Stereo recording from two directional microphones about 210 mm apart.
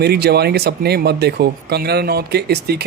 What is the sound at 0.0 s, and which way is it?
Speech, 50° right (ahead or behind).